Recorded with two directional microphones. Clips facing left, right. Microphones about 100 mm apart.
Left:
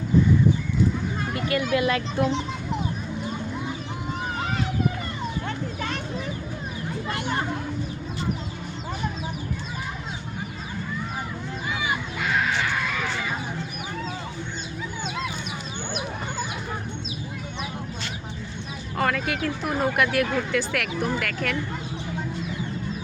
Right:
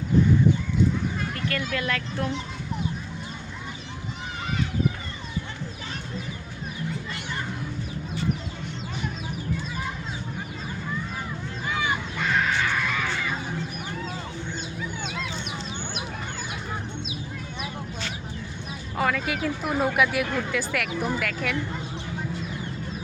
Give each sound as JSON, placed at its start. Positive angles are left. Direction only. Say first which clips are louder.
{"t": 1.7, "sound": "speech", "louder": "left 6 dB", "side_deg": 15}
{"t": 7.1, "sound": "a sound", "louder": "left 6 dB", "side_deg": 60}
{"t": 11.8, "sound": "crow", "louder": "right 2 dB", "side_deg": 10}
{"t": 18.9, "sound": "speech", "louder": "left 1 dB", "side_deg": 0}